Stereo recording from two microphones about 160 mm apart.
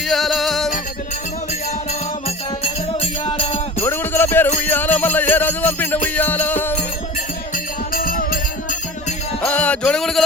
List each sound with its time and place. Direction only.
0.1 s music: centre (ahead or behind)
2.2 s music: 40° left (ahead or behind)
3.8 s jingle bell: 15° left (ahead or behind)
4.6 s music: 10° left (ahead or behind)
7.5 s music: 60° left (ahead or behind)
9.4 s music: 10° left (ahead or behind)